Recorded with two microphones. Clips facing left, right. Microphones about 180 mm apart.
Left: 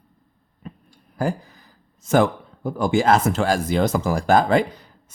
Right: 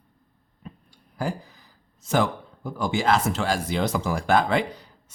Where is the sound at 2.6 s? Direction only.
50° left (ahead or behind).